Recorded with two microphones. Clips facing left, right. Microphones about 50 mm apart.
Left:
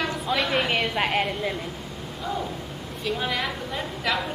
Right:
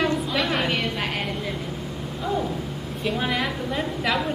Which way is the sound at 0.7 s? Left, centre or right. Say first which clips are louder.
Left 2 dB; left.